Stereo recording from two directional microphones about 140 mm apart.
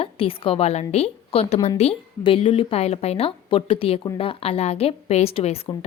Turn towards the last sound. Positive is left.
turn(degrees=45)  # may be behind; listen again after turning